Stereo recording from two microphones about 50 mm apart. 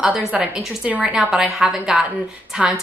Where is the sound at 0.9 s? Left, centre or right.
Right.